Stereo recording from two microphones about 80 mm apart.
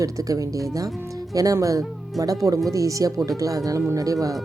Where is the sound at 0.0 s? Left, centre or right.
Right.